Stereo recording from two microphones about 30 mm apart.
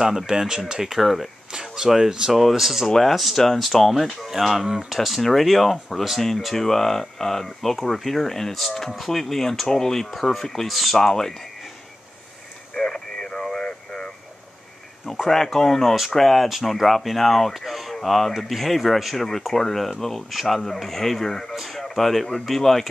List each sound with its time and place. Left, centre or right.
0.3 s speech: centre
0.9 s speech: centre
1.5 s speech: centre
6.5 s speech: centre
9.7 s speech: centre
10.0 s speech: centre
10.7 s speech: centre
11.0 s speech: centre
12.7 s radio: left
13.8 s a sound: left
15.2 s speech: centre
16.4 s speech: centre
17.6 s speech: centre